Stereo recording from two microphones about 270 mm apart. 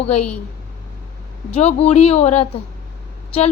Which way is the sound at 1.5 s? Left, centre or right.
Left.